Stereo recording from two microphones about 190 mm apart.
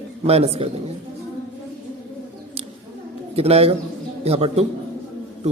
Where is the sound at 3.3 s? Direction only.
30° right (ahead or behind).